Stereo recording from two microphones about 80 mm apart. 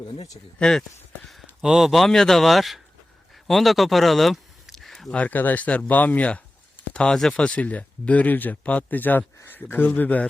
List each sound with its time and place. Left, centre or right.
0.6 s speech: centre
1.6 s speech: centre
3.4 s a sound: centre
5.1 s speech: centre